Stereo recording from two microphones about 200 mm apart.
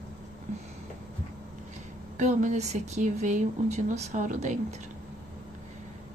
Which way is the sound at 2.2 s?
35° right (ahead or behind).